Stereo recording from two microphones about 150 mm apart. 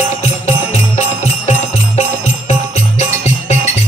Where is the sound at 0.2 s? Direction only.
50° left (ahead or behind).